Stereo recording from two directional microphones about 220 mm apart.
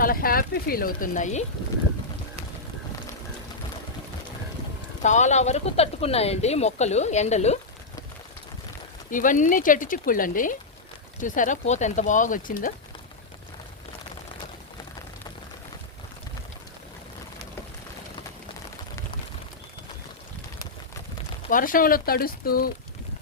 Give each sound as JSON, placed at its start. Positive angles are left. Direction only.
{"t": 0.0, "sound": "speech", "side_deg": 40}
{"t": 5.0, "sound": "speech", "side_deg": 35}
{"t": 9.0, "sound": "speech", "side_deg": 35}
{"t": 21.5, "sound": "speech", "side_deg": 40}